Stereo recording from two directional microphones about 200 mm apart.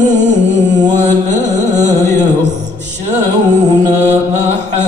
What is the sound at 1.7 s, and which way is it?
Music, 10° left (ahead or behind).